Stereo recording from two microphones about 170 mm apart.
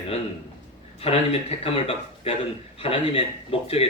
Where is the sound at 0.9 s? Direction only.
35° left (ahead or behind).